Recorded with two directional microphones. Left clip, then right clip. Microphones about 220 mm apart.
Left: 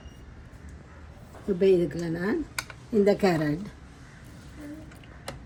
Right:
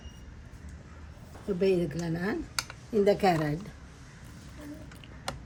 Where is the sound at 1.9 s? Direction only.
15° left (ahead or behind).